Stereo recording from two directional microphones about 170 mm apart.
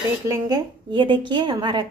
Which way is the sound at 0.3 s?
20° right (ahead or behind).